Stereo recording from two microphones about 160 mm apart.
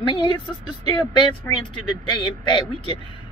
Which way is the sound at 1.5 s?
15° left (ahead or behind).